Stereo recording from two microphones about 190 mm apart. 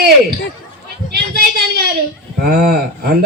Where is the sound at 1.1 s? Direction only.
55° right (ahead or behind).